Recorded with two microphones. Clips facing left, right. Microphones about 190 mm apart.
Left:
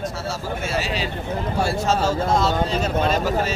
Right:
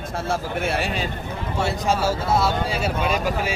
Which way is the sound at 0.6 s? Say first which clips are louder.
Right 1 dB; 60° right (ahead or behind).